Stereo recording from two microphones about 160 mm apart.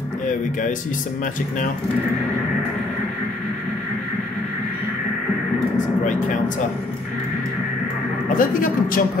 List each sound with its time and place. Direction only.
8.4 s speech: 60° left (ahead or behind)